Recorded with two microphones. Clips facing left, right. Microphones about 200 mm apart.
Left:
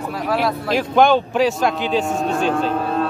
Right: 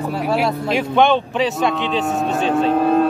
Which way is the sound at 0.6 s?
Centre (ahead or behind).